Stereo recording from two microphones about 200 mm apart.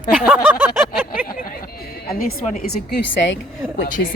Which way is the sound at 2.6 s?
50° left (ahead or behind).